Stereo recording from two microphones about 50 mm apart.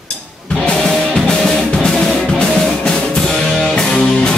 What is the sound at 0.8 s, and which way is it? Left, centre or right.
Music, centre.